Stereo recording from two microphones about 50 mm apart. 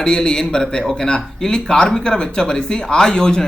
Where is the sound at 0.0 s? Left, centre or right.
Centre.